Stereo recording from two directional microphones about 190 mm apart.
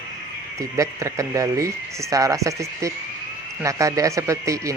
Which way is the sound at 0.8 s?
15° right (ahead or behind).